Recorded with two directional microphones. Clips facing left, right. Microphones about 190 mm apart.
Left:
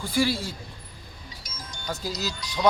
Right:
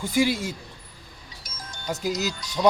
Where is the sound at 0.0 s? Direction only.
20° right (ahead or behind).